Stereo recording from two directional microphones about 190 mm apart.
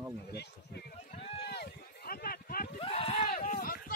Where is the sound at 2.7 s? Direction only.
30° left (ahead or behind).